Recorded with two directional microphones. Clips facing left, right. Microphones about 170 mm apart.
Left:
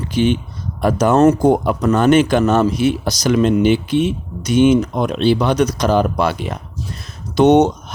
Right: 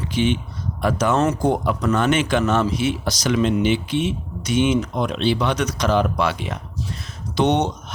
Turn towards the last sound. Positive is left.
turn(degrees=45)  # may be behind; listen again after turning